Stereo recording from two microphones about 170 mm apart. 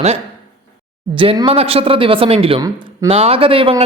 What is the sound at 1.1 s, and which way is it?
A man's voice, 30° right (ahead or behind).